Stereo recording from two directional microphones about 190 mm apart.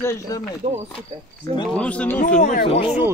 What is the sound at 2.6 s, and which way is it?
Speech, 30° left (ahead or behind).